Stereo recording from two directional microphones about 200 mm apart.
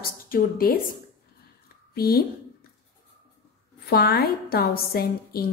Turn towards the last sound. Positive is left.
turn(degrees=50)  # may be behind; listen again after turning